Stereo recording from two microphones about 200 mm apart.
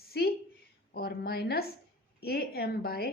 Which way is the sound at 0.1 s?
55° left (ahead or behind).